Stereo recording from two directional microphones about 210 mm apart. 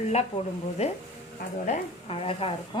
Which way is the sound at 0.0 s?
30° left (ahead or behind).